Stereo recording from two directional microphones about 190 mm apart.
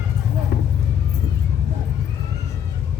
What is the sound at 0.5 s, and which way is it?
Music, 55° left (ahead or behind).